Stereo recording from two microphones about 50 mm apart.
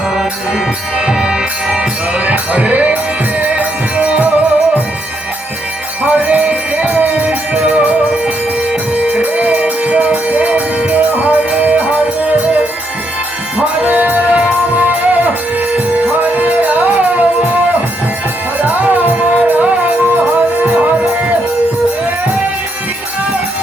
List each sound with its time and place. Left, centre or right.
0.9 s music: centre; by 3.7 s right
3.9 s music: centre
4.2 s music: right
6.0 s music: right
9.0 s music: right
13.8 s music: right
18.6 s music: right